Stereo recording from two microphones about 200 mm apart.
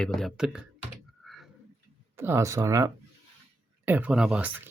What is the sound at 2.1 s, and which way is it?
Speech, 10° right (ahead or behind).